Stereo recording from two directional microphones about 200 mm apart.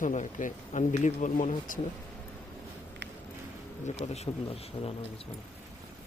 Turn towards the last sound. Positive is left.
turn(degrees=30)  # may be behind; listen again after turning